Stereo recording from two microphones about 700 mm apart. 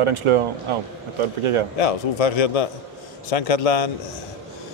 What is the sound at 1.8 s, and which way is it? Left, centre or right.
A man's voice, left.